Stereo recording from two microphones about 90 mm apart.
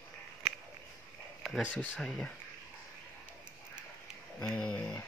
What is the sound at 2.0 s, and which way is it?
Speech, 10° left (ahead or behind).